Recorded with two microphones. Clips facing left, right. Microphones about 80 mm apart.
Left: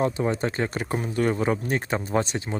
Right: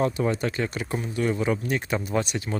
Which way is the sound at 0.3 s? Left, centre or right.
Left.